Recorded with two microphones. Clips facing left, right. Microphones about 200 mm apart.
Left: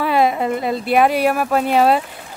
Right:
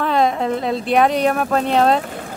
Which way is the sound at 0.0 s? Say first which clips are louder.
Left 1 dB; 5° left (ahead or behind).